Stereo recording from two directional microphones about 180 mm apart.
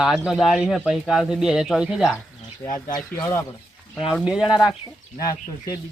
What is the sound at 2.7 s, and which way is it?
Speech, 20° left (ahead or behind).